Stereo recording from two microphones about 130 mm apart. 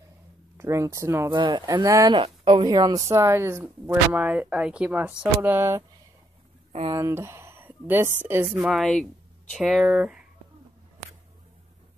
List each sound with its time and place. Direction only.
0.6 s speech: 20° right (ahead or behind)
1.3 s speech: 35° right (ahead or behind)
2.1 s a woman's voice: 40° right (ahead or behind)
3.1 s speech: 20° right (ahead or behind)
6.9 s speech: 25° right (ahead or behind)
8.5 s speech: centre (ahead or behind)